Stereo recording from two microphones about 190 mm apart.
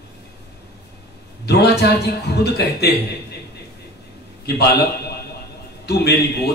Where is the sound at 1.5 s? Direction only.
60° left (ahead or behind).